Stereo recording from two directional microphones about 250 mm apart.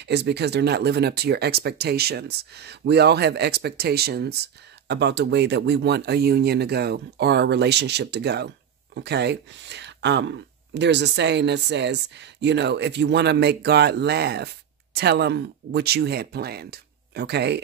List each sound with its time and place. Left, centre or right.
0.0 s speech: right